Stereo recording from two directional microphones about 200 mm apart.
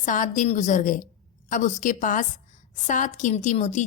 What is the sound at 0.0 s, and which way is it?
Speech, 40° left (ahead or behind).